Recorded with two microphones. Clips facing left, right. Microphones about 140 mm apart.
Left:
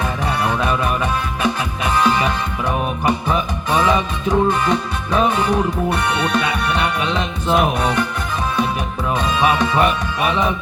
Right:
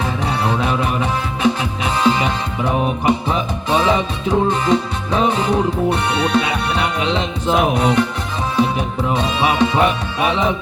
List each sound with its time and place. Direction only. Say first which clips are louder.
0.4 s music: even; 25° right (ahead or behind)
9.1 s music: even; 25° right (ahead or behind)
10.2 s speech: right 1 dB; 25° right (ahead or behind)